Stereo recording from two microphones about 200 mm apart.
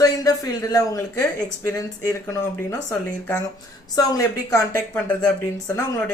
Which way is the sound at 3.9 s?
15° left (ahead or behind).